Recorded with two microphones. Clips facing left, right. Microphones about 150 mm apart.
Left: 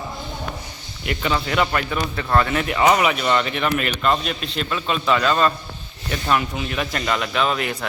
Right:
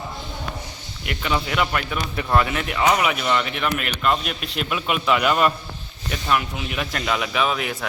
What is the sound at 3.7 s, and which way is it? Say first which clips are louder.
A man's voice: left 1 dB; 5° right (ahead or behind).